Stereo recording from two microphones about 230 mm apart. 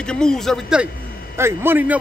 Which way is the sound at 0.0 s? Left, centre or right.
Centre.